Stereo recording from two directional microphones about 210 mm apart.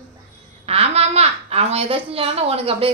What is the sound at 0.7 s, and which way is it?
A child's voice, 30° right (ahead or behind).